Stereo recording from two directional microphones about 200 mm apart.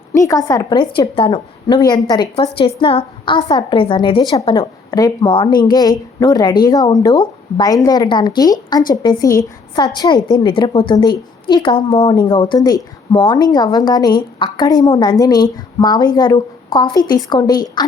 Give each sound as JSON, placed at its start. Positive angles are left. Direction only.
{"t": 0.1, "sound": "a woman's voice", "side_deg": 15}